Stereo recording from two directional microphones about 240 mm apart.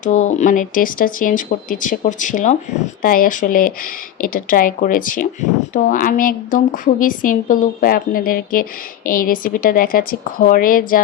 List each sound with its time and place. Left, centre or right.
0.0 s speech: left